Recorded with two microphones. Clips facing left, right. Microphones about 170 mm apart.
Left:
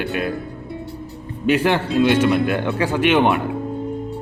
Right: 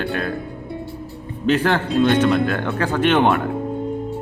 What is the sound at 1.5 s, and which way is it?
Speech, 15° left (ahead or behind).